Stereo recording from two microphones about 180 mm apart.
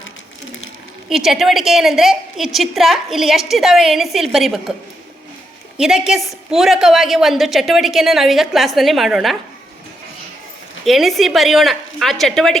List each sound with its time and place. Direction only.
1.1 s a woman's voice: centre (ahead or behind)
5.7 s a woman's voice: 5° right (ahead or behind)
10.8 s a woman's voice: centre (ahead or behind)